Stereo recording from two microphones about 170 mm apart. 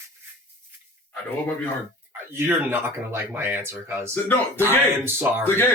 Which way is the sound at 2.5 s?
10° right (ahead or behind).